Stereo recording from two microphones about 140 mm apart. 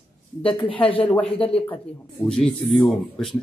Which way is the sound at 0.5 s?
40° left (ahead or behind).